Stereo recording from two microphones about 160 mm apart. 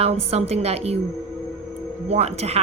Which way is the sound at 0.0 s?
40° right (ahead or behind).